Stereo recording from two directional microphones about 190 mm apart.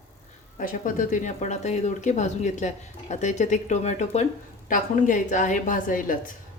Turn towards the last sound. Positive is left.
turn(degrees=45)  # may be behind; listen again after turning